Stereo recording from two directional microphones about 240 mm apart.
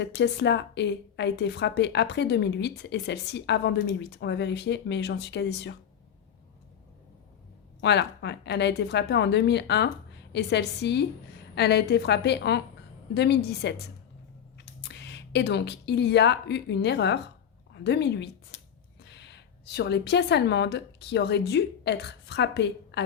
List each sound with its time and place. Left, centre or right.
0.2 s a woman's voice: left
7.8 s a woman's voice: left